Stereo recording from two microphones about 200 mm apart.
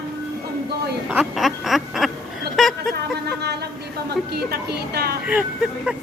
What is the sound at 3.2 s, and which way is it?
A woman's voice, 55° right (ahead or behind).